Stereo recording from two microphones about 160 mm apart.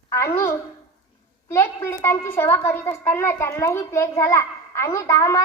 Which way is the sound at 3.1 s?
15° left (ahead or behind).